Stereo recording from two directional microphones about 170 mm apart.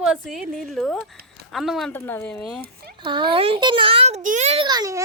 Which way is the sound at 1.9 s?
10° left (ahead or behind).